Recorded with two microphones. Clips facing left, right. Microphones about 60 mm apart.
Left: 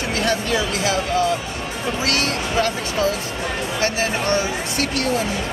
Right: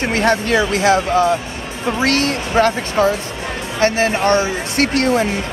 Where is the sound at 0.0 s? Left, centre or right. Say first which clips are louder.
Right 5 dB; right.